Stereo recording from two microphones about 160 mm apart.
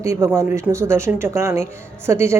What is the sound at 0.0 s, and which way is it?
Speech, 20° right (ahead or behind).